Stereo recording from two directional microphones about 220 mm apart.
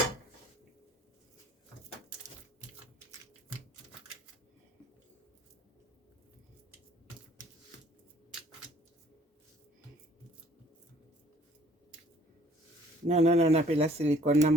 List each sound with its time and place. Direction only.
13.1 s speech: 30° right (ahead or behind)